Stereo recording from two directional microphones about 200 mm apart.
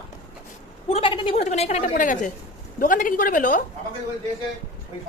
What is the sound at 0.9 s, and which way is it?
A woman's voice, 25° left (ahead or behind).